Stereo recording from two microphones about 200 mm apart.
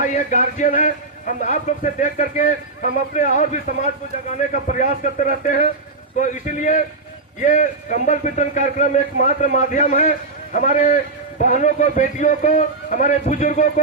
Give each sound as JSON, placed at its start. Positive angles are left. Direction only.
{"t": 0.0, "sound": "a man's voice", "side_deg": 40}